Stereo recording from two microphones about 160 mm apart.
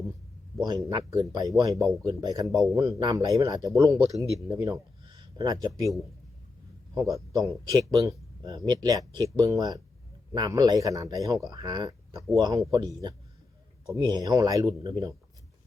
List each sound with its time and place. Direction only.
0.6 s a man's voice: 25° right (ahead or behind)
2.5 s speech: centre (ahead or behind)
2.7 s a man's voice: 20° right (ahead or behind)
6.9 s a man's voice: 20° right (ahead or behind)